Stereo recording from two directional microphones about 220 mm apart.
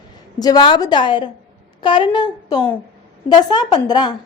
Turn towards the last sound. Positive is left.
turn(degrees=20)  # may be behind; listen again after turning